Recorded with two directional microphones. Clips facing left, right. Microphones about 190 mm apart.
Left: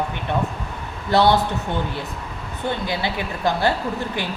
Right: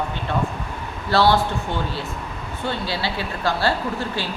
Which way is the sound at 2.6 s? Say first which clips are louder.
Left 2 dB; 20° left (ahead or behind).